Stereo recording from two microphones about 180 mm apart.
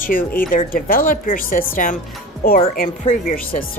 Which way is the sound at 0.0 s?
50° left (ahead or behind).